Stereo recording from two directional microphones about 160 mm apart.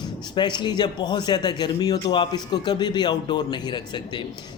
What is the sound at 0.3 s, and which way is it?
A man's voice, 30° left (ahead or behind).